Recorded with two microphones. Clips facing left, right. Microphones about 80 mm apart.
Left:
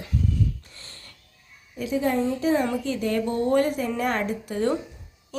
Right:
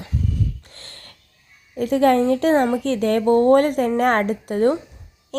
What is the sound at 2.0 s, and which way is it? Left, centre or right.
Speech, right.